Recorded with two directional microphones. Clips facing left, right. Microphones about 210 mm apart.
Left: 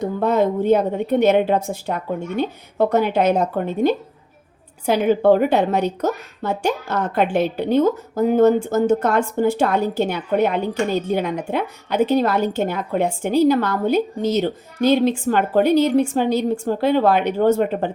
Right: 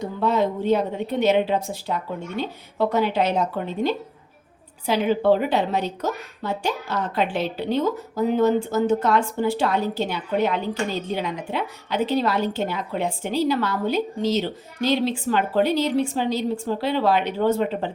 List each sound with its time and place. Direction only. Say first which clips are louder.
0.2 s a woman's voice: left 3 dB; 50° left (ahead or behind)